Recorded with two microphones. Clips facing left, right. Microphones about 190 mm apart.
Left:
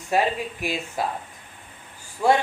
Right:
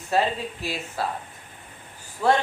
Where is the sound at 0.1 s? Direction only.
15° left (ahead or behind).